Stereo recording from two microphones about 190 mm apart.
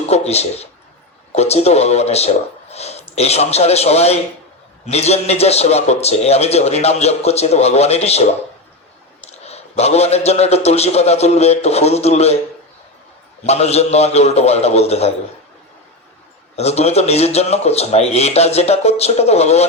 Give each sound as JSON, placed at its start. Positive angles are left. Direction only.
{"t": 0.1, "sound": "a man's voice", "side_deg": 35}
{"t": 13.4, "sound": "a man's voice", "side_deg": 35}
{"t": 16.6, "sound": "a man's voice", "side_deg": 35}